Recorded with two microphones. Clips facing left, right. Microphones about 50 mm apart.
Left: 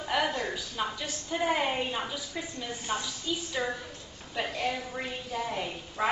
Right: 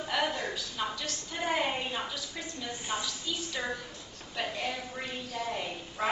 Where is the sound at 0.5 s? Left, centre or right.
Centre.